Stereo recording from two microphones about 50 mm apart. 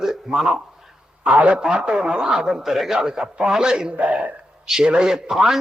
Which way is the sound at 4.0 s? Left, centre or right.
Right.